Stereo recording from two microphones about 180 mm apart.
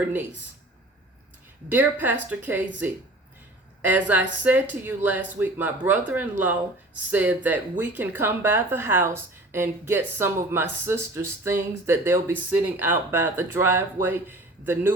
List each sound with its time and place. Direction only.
1.7 s speech: 10° right (ahead or behind)